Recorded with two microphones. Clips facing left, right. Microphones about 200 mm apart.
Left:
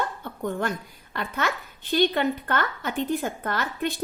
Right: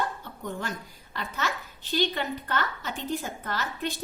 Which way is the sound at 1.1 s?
55° left (ahead or behind).